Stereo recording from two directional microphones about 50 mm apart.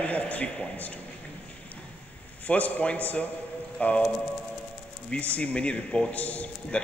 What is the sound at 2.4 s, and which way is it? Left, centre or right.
A man's voice, left.